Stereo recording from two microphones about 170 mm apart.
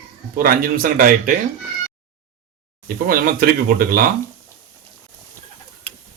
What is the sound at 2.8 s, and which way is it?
Speech, 60° right (ahead or behind).